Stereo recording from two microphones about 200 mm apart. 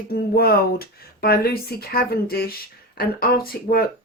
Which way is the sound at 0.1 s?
50° left (ahead or behind).